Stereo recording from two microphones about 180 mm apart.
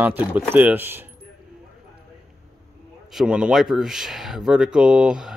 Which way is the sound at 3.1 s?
5° right (ahead or behind).